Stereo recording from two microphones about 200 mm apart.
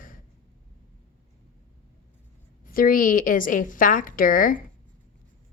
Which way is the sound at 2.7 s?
45° left (ahead or behind).